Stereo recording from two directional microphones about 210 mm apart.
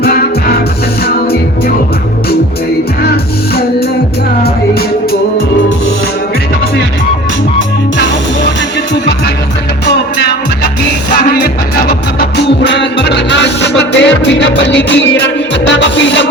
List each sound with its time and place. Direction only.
0.0 s music: 45° left (ahead or behind)
12.4 s music: 55° left (ahead or behind)